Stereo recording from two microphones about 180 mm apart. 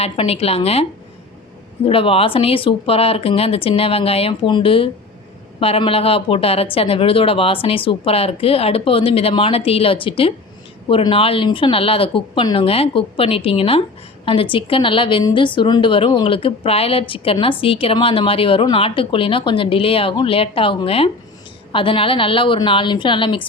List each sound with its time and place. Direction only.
0.0 s a woman's voice: 35° left (ahead or behind)